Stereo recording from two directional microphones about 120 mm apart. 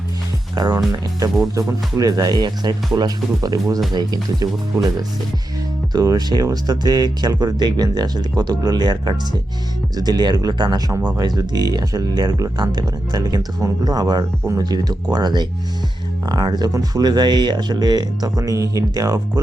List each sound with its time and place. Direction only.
0.5 s speech: 35° right (ahead or behind)
2.0 s speech: 30° right (ahead or behind)